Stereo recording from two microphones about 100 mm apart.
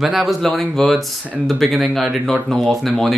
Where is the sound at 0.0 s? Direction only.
5° right (ahead or behind).